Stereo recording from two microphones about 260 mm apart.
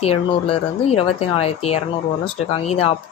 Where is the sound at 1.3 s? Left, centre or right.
Left.